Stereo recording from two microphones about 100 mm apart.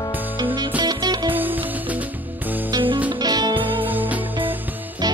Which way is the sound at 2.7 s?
55° right (ahead or behind).